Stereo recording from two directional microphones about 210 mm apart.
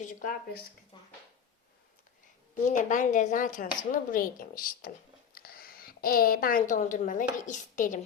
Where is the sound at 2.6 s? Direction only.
35° left (ahead or behind).